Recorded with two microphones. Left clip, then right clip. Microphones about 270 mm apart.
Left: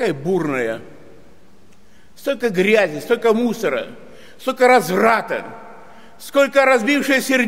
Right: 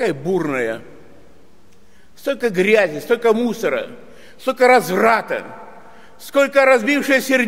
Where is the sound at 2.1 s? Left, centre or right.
Centre.